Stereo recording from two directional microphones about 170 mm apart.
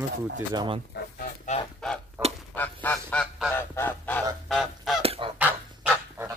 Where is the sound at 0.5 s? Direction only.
30° right (ahead or behind).